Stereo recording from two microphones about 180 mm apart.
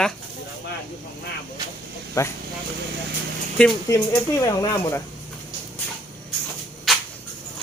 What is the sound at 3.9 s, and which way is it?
Speech, 15° left (ahead or behind).